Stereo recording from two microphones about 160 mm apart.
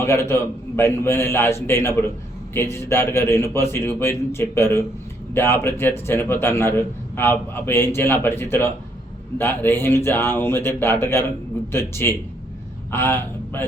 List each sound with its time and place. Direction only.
0.0 s a man's voice: 15° left (ahead or behind)